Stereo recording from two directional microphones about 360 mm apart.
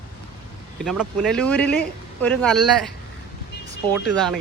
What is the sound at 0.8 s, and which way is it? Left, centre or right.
Speech, centre.